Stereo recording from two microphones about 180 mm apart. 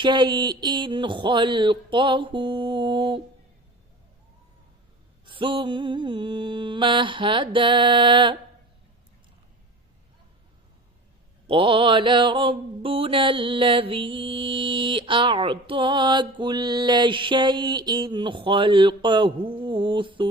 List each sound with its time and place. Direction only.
0.0 s mantra: 25° right (ahead or behind)
5.2 s mantra: 25° right (ahead or behind)
11.4 s mantra: 30° right (ahead or behind)